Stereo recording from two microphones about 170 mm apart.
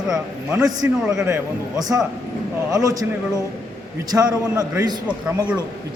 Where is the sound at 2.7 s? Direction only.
20° right (ahead or behind).